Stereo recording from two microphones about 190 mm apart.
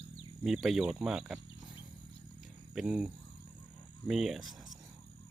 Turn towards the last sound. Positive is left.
turn(degrees=0)  # may be behind; listen again after turning